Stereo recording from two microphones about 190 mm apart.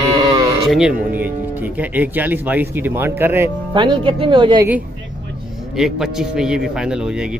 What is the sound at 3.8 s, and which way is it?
Speech, 25° right (ahead or behind).